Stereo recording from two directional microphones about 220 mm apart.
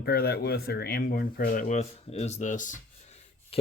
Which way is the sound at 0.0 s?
45° left (ahead or behind).